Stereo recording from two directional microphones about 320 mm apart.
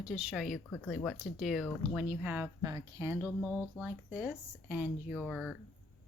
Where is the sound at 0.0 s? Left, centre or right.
Centre.